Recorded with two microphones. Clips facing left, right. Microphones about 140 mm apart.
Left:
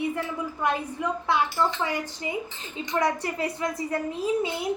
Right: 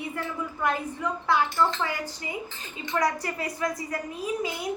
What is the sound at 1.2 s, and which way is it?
Speech, 20° left (ahead or behind).